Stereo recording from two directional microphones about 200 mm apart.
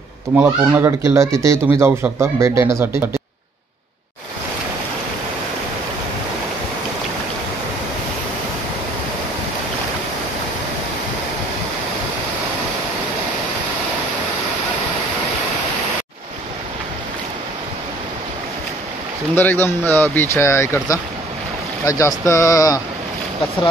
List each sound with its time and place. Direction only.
0.4 s speech: 10° right (ahead or behind)
19.3 s speech: 10° left (ahead or behind)